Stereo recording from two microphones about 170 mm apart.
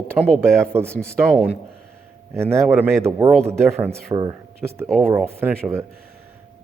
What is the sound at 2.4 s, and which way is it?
Speech, 15° right (ahead or behind).